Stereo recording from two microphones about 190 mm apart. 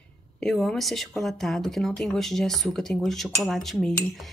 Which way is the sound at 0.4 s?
Centre (ahead or behind).